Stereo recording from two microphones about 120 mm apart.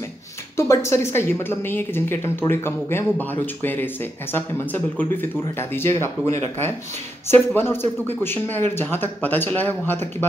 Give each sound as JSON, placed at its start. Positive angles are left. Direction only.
{"t": 0.6, "sound": "a woman's voice", "side_deg": 20}